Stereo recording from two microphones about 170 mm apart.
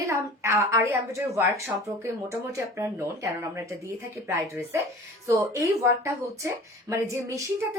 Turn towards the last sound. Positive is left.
turn(degrees=-20)  # may be behind; listen again after turning